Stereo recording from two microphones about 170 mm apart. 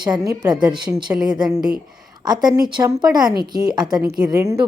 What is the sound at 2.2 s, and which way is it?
Speech, 25° right (ahead or behind).